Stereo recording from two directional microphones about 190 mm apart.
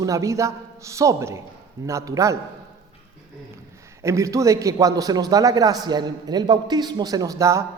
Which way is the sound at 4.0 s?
15° right (ahead or behind).